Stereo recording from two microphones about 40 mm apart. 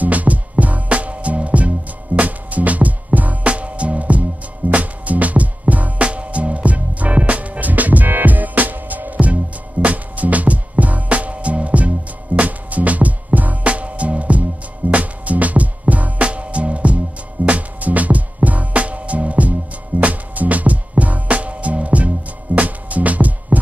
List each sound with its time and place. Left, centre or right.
0.0 s music: right